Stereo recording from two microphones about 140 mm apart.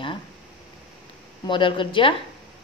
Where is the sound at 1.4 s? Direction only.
35° left (ahead or behind).